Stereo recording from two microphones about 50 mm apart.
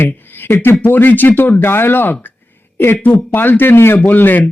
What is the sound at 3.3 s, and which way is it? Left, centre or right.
Speech, left.